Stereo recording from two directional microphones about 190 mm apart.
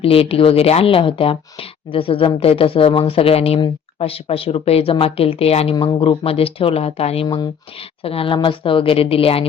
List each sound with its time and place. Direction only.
0.0 s speech: 30° left (ahead or behind)